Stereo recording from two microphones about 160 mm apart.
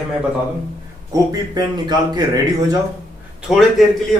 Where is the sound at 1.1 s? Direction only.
25° right (ahead or behind).